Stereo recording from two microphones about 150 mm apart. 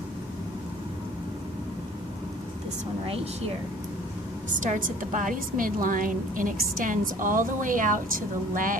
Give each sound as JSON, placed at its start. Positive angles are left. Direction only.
{"t": 4.6, "sound": "a woman's voice", "side_deg": -60}